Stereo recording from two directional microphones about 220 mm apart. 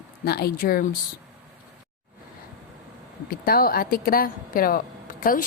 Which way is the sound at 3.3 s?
40° left (ahead or behind).